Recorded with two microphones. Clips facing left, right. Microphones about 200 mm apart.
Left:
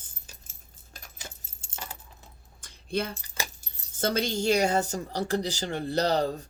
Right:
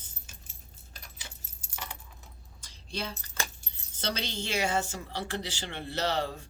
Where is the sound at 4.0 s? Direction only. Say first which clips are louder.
Left 8 dB; 45° left (ahead or behind).